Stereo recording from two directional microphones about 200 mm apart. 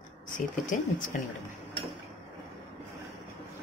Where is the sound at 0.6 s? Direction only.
40° left (ahead or behind).